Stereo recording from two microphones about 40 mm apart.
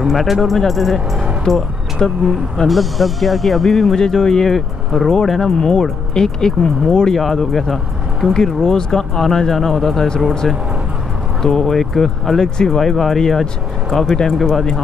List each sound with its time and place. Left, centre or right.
0.0 s speech: centre
2.0 s speech: centre
2.7 s speech: centre
7.2 s speech: centre
8.5 s speech: centre
9.1 s speech: centre
11.4 s speech: centre
11.7 s speech: centre